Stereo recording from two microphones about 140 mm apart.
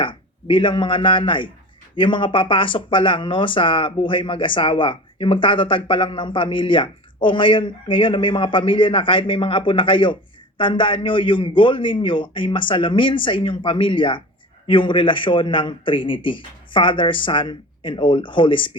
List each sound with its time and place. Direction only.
0.0 s a man's voice: 35° left (ahead or behind)